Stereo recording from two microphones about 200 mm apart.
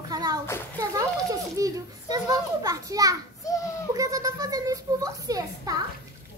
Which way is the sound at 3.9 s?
15° right (ahead or behind).